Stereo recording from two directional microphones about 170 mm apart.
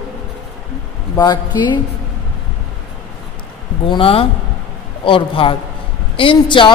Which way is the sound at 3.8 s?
30° left (ahead or behind).